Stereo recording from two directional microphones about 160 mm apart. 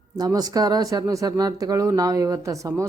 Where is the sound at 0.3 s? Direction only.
25° right (ahead or behind).